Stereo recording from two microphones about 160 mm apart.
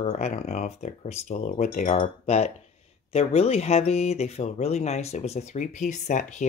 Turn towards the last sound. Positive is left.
turn(degrees=50)  # may be behind; listen again after turning